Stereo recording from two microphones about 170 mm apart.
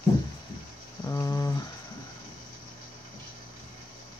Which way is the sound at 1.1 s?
20° left (ahead or behind).